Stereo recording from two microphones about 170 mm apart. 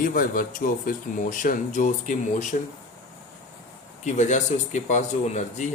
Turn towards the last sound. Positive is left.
turn(degrees=45)  # may be behind; listen again after turning